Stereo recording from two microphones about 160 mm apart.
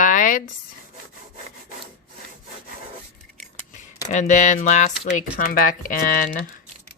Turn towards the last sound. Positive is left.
turn(degrees=55)  # may be behind; listen again after turning